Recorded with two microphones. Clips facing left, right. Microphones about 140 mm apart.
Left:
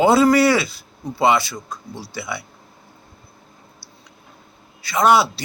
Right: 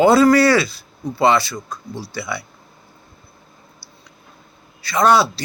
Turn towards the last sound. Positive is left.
turn(degrees=15)  # may be behind; listen again after turning